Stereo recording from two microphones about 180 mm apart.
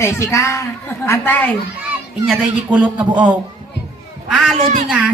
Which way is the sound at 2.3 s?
5° right (ahead or behind).